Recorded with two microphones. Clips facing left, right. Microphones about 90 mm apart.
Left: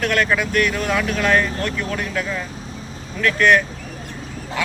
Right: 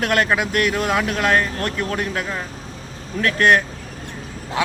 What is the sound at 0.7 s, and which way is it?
Speech, 35° right (ahead or behind).